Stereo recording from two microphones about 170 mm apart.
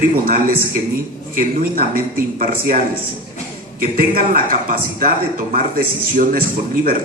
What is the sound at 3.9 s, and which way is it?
A man's voice, 60° right (ahead or behind).